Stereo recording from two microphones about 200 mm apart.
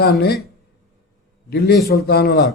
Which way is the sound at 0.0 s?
50° left (ahead or behind).